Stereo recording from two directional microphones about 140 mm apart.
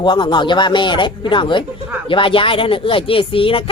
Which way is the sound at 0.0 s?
35° left (ahead or behind).